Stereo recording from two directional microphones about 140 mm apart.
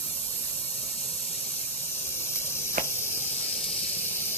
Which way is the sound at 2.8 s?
90° right.